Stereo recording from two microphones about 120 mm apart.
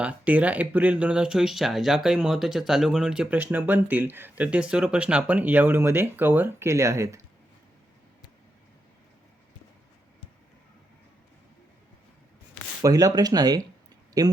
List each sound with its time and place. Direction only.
0.0 s speech: 10° right (ahead or behind)
12.8 s speech: 30° right (ahead or behind)